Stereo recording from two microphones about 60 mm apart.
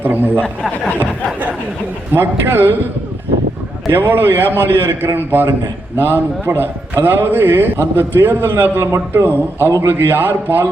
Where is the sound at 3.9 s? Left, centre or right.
Right.